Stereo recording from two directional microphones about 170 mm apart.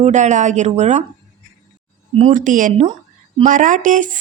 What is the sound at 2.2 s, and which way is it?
A woman's voice, 45° right (ahead or behind).